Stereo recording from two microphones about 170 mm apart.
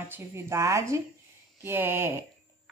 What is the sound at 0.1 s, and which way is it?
A woman's voice, 15° right (ahead or behind).